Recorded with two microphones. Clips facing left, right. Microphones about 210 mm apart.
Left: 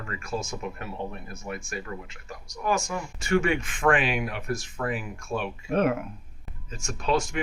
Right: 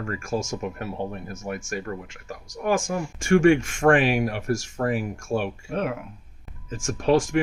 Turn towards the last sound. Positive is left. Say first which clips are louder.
# right 6 dB
turn(degrees=-50)  # may be behind; listen again after turning